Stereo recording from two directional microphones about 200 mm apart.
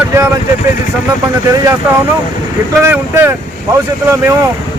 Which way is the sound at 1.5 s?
15° right (ahead or behind).